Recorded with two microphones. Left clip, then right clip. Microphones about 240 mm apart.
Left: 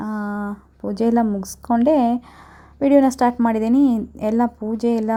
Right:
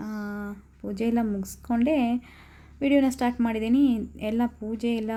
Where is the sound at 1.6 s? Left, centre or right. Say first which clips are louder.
Left 9 dB; left.